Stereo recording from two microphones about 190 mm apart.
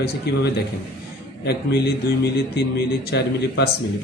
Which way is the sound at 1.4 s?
60° left (ahead or behind).